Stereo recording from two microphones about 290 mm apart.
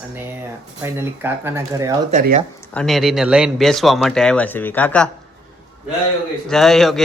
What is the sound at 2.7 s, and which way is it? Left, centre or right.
Speech, centre.